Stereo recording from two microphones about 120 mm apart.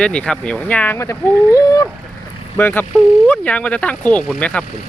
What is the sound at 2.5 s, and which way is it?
Speech, 15° left (ahead or behind).